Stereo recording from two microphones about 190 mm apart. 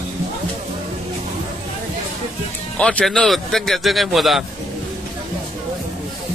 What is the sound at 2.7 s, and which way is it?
Speech, 5° left (ahead or behind).